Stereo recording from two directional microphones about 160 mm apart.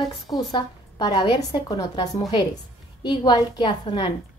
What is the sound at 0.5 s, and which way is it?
A woman's voice, 25° left (ahead or behind).